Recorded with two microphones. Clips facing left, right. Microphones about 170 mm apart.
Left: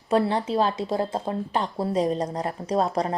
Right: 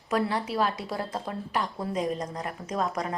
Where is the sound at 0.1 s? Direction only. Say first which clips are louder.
Left 5 dB; 30° left (ahead or behind).